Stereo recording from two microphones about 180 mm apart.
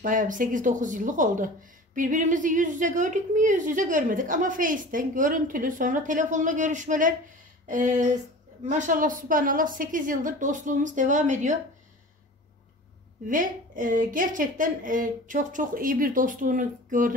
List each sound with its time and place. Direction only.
0.0 s speech: 50° right (ahead or behind)
13.3 s speech: 50° right (ahead or behind)